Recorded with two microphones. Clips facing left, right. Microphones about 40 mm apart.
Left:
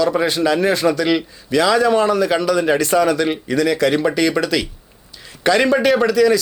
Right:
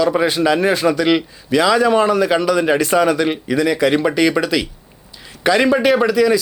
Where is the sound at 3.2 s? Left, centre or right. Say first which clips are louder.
Right 1 dB; centre.